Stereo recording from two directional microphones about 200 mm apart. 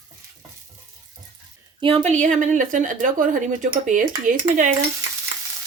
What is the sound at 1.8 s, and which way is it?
Speech, 25° right (ahead or behind).